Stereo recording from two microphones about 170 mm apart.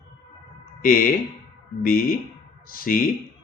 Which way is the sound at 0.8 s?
55° left (ahead or behind).